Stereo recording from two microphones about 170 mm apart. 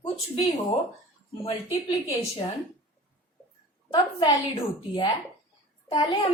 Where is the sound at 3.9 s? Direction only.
30° left (ahead or behind).